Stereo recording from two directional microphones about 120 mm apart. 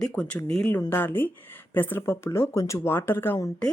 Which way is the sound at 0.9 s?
15° left (ahead or behind).